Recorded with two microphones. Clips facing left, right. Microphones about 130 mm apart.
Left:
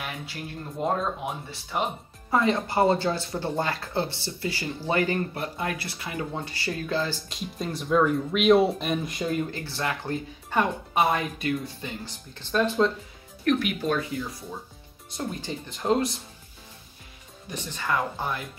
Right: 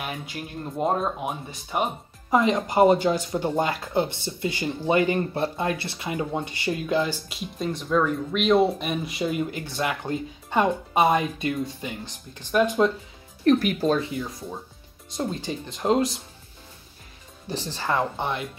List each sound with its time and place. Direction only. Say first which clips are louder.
1.7 s speech: right 2 dB; 20° right (ahead or behind)
7.2 s speech: right 3 dB; centre (ahead or behind)
9.5 s speech: right 3 dB; 15° right (ahead or behind)
13.4 s speech: right 5 dB; 35° right (ahead or behind)
14.1 s speech: right 1 dB; 20° right (ahead or behind)
17.5 s speech: right 2 dB; 30° right (ahead or behind)